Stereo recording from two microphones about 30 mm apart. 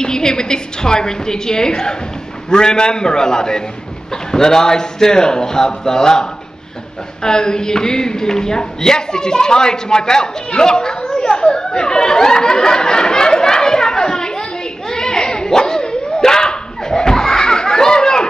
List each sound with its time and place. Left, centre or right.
0.0 s a woman's voice: left
7.2 s speech: left
14.9 s dog: left